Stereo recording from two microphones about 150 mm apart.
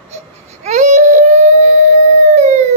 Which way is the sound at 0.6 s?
55° right (ahead or behind).